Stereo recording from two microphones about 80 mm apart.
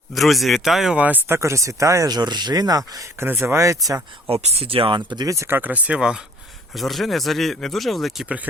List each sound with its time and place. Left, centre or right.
0.1 s speech: centre
0.9 s speech: right
1.4 s speech: right
3.2 s speech: right
4.7 s speech: right
5.5 s speech: right
6.7 s speech: centre